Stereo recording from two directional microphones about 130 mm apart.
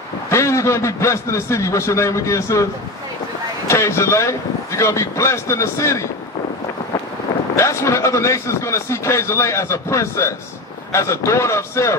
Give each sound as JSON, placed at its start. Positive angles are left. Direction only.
{"t": 0.3, "sound": "a man's voice", "side_deg": 20}
{"t": 7.5, "sound": "a man's voice", "side_deg": 25}